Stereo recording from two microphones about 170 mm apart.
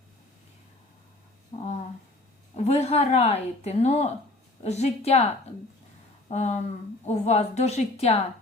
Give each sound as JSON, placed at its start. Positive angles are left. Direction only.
{"t": 2.6, "sound": "speech", "side_deg": 40}
{"t": 6.3, "sound": "speech", "side_deg": 40}